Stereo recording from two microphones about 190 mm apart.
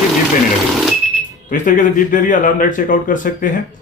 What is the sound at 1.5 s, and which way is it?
Speech, 45° left (ahead or behind).